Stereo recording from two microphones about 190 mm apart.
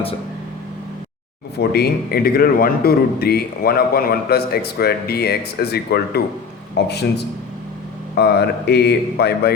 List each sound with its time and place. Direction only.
1.5 s a man's voice: 55° left (ahead or behind)
8.1 s a man's voice: 60° left (ahead or behind)